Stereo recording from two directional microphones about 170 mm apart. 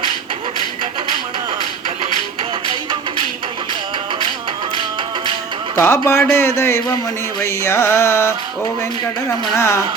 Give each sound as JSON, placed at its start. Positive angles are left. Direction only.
{"t": 5.7, "sound": "carnatic music", "side_deg": 15}
{"t": 9.6, "sound": "carnatic music", "side_deg": 15}